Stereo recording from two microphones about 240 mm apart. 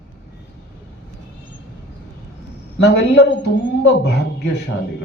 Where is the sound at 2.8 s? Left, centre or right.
Left.